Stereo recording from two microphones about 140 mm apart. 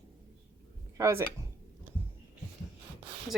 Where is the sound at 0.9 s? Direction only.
20° right (ahead or behind).